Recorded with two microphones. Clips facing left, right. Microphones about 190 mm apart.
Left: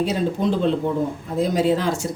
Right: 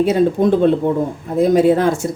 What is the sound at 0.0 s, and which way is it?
Speech, 55° right (ahead or behind).